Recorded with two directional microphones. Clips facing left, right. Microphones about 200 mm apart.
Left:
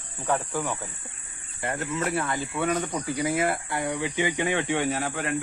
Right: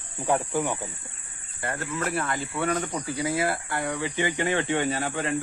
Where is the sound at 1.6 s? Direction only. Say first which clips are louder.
Left 2 dB; 20° left (ahead or behind).